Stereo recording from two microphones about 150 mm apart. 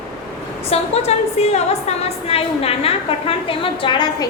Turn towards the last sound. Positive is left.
turn(degrees=30)  # may be behind; listen again after turning